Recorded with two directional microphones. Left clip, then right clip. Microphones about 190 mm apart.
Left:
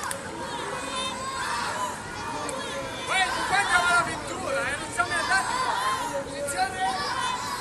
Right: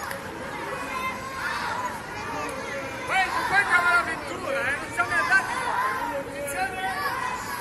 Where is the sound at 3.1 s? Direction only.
5° right (ahead or behind).